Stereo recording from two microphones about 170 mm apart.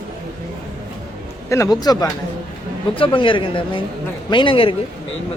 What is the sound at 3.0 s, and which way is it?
Speech, 30° left (ahead or behind).